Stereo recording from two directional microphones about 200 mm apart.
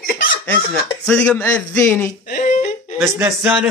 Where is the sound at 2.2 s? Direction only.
40° left (ahead or behind).